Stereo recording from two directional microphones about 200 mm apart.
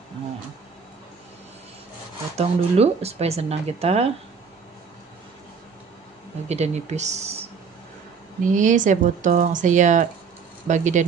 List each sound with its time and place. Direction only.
2.3 s speech: 30° right (ahead or behind)
6.5 s speech: 35° right (ahead or behind)
8.5 s speech: 40° right (ahead or behind)